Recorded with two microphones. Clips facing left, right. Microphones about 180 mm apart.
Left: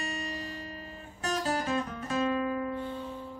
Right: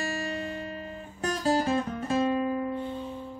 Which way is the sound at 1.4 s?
30° right (ahead or behind).